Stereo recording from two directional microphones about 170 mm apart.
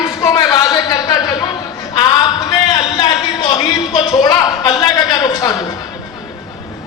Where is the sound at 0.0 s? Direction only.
25° left (ahead or behind).